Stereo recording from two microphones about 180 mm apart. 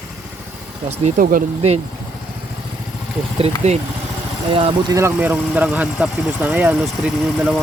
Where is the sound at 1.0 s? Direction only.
50° right (ahead or behind).